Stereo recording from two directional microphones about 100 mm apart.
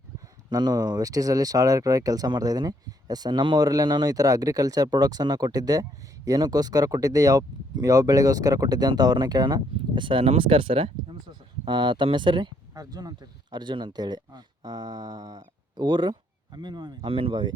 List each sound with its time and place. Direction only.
0.5 s speech: 40° right (ahead or behind); by 11.2 s 65° right (ahead or behind)
11.3 s speech: 50° right (ahead or behind)
12.7 s speech: 40° right (ahead or behind); by 17.5 s 55° right (ahead or behind)